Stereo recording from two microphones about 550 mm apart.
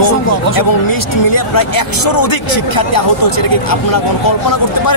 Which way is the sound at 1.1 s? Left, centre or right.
Left.